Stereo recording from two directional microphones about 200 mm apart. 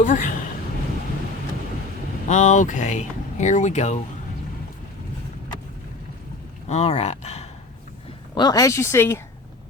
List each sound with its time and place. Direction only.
0.0 s speech: 40° left (ahead or behind)
2.2 s speech: 35° left (ahead or behind)
6.7 s speech: 30° left (ahead or behind)
8.4 s speech: 20° left (ahead or behind)